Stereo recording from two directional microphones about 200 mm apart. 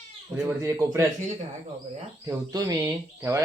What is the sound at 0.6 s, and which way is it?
Speech, 15° right (ahead or behind).